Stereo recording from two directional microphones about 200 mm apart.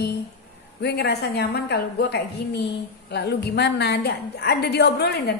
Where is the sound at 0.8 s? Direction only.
55° left (ahead or behind).